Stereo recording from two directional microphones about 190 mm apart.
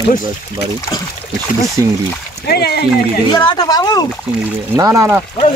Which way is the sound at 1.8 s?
15° right (ahead or behind).